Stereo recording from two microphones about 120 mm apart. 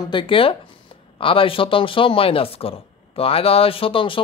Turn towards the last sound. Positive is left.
turn(degrees=45)  # may be behind; listen again after turning